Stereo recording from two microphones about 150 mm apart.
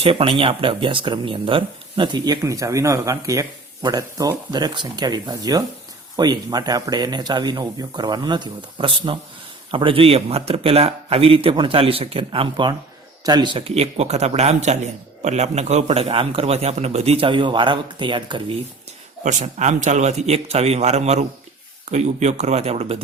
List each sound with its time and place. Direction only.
0.0 s a man's voice: 40° right (ahead or behind)
19.2 s a man's voice: 55° right (ahead or behind)